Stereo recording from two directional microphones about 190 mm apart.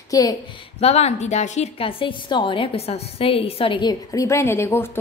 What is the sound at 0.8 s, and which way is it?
A woman's voice, 35° left (ahead or behind).